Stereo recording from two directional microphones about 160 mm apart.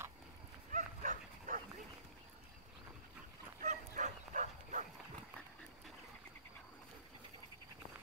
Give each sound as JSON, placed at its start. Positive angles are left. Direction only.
{"t": 0.7, "sound": "dog", "side_deg": -55}
{"t": 3.6, "sound": "bow-wow", "side_deg": -55}